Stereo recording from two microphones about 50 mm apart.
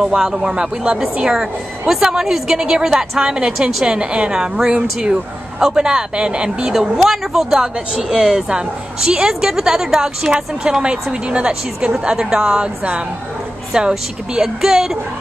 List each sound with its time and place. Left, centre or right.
0.0 s speech: centre
6.7 s speech: centre
13.7 s speech: centre